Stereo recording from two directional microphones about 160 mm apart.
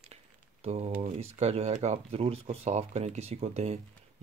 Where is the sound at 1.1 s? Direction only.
45° right (ahead or behind).